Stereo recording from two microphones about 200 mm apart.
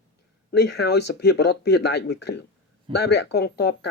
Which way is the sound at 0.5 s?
55° left (ahead or behind).